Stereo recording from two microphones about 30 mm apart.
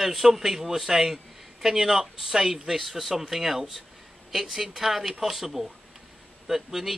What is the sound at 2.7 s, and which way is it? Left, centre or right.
Speech, centre.